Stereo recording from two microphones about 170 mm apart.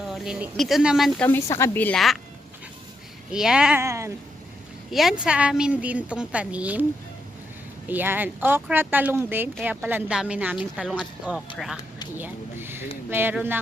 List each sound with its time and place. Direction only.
0.1 s speech: 5° right (ahead or behind)
1.3 s a woman's voice: 15° left (ahead or behind)
3.3 s speech: 5° right (ahead or behind)
3.8 s speech: 15° right (ahead or behind)
4.9 s speech: centre (ahead or behind)
7.9 s speech: 10° right (ahead or behind)